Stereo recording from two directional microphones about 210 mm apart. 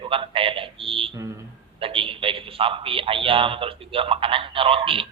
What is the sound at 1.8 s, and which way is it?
A man's voice, 25° right (ahead or behind).